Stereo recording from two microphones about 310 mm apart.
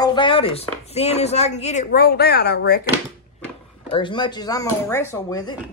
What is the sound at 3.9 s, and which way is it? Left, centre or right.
Speech, centre.